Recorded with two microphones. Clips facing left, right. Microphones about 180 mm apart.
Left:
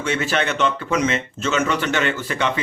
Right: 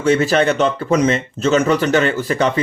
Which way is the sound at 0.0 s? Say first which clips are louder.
Right 8 dB; 35° right (ahead or behind).